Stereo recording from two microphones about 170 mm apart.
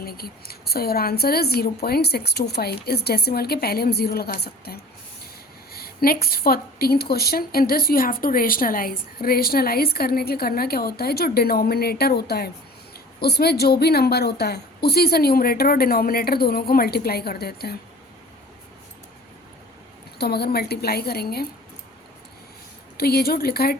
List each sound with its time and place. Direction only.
0.0 s a woman's voice: 65° left (ahead or behind)
20.1 s a woman's voice: 70° left (ahead or behind)
23.0 s a woman's voice: 65° left (ahead or behind)